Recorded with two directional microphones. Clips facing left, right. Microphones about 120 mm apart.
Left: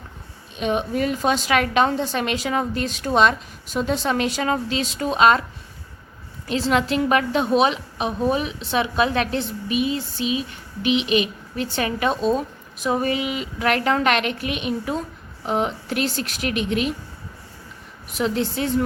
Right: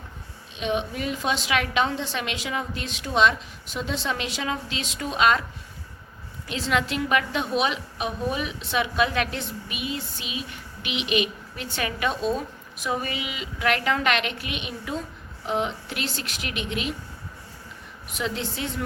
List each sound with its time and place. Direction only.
0.6 s a woman's voice: 45° left (ahead or behind)
6.5 s a woman's voice: 35° left (ahead or behind)
18.1 s a woman's voice: 40° left (ahead or behind)